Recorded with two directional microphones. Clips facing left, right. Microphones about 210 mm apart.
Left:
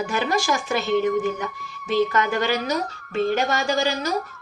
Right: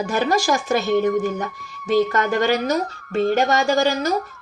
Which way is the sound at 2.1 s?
45° right (ahead or behind).